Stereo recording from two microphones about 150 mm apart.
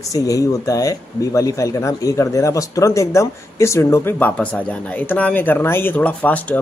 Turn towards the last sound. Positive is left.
turn(degrees=10)  # may be behind; listen again after turning